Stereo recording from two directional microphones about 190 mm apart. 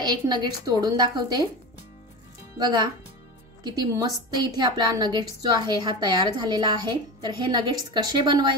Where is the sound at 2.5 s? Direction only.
20° right (ahead or behind).